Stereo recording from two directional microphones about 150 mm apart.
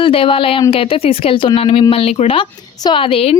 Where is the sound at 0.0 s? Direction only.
35° left (ahead or behind).